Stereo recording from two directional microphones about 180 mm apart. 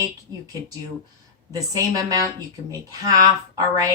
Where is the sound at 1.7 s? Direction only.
20° right (ahead or behind).